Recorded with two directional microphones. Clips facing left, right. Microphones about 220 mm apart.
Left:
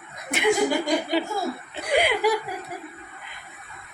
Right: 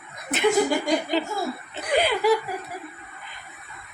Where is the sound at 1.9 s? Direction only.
15° left (ahead or behind).